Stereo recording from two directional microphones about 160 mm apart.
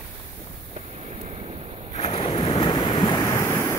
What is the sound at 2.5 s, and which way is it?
Waves, 25° left (ahead or behind).